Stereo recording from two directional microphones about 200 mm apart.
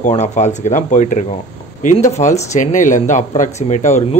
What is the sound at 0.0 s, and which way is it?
A man's voice, 35° left (ahead or behind).